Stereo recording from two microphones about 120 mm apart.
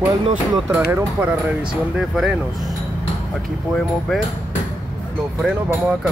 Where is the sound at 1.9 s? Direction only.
5° right (ahead or behind).